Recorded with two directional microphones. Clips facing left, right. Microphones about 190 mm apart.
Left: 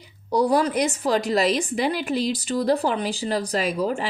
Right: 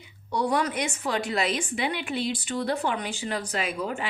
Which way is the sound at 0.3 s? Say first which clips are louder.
Left 6 dB; 35° left (ahead or behind).